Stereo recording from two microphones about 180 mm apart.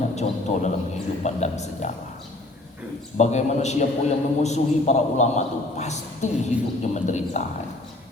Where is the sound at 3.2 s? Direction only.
40° left (ahead or behind).